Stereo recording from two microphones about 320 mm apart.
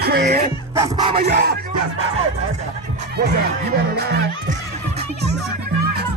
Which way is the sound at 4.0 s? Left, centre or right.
Right.